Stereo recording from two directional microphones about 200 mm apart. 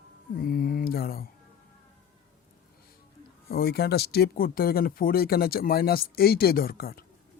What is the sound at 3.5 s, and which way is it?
Speech, 50° left (ahead or behind).